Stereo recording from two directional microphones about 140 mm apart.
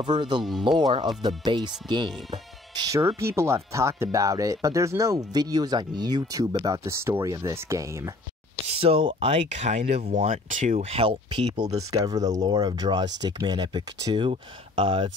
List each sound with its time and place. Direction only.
0.0 s speech: 35° right (ahead or behind)
0.4 s speech: centre (ahead or behind)
0.7 s speech: 35° right (ahead or behind)
2.3 s music: 30° right (ahead or behind)
3.2 s speech: 20° right (ahead or behind)
8.6 s speech: 45° right (ahead or behind); by 10.9 s 65° right (ahead or behind)
10.9 s speech: 40° right (ahead or behind)